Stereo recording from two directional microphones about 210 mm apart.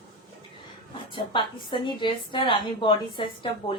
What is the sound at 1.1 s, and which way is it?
A woman's voice, 25° left (ahead or behind).